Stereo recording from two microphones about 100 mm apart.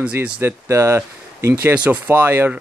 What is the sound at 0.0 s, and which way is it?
Speech, 15° right (ahead or behind).